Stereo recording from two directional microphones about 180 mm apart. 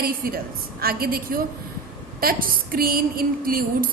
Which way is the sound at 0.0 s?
55° right (ahead or behind).